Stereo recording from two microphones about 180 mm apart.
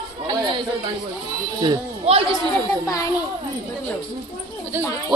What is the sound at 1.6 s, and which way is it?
Speech, 30° right (ahead or behind).